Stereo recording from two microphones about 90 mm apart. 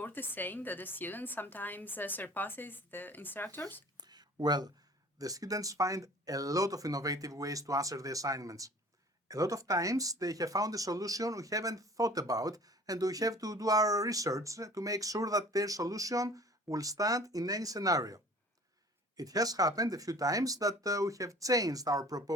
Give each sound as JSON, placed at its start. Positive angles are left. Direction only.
{"t": 0.0, "sound": "a woman's voice", "side_deg": 20}
{"t": 3.9, "sound": "a sound", "side_deg": -50}
{"t": 5.2, "sound": "speech", "side_deg": -40}